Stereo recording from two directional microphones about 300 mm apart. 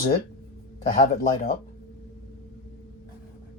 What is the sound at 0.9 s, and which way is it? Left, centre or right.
Speech, left.